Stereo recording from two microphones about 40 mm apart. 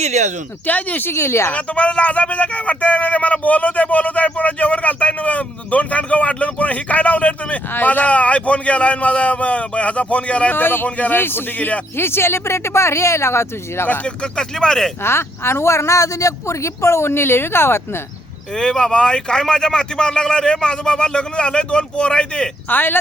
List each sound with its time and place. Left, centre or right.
0.6 s speech: left
1.0 s speech: left
1.5 s a man's voice: left
7.7 s a man's voice: left
10.5 s a man's voice: left
10.8 s a man's voice: left
11.1 s a man's voice: left
11.9 s speech: left
14.0 s speech: left
15.0 s speech: left
17.0 s speech: left
18.5 s speech: centre
22.7 s a man's voice: left